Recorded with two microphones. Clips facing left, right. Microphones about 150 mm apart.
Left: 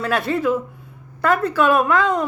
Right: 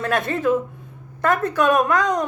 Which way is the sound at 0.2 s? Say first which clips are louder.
Even; 50° right (ahead or behind).